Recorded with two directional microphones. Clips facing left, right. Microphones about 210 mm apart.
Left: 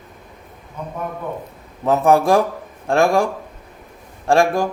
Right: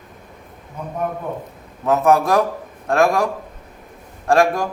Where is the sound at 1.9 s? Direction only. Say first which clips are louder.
Left 1 dB; 30° left (ahead or behind).